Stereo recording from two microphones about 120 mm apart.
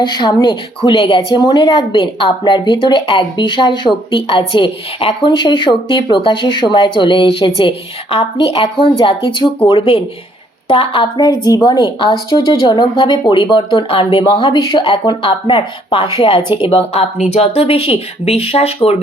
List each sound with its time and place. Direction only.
0.0 s a woman's voice: 35° left (ahead or behind)
8.2 s a woman's voice: 35° left (ahead or behind); by 10.0 s 55° left (ahead or behind)
10.7 s a woman's voice: 45° left (ahead or behind)
11.2 s a woman's voice: 30° left (ahead or behind); by 17.1 s 55° left (ahead or behind)
17.2 s speech: 75° left (ahead or behind); by 19.0 s 55° left (ahead or behind)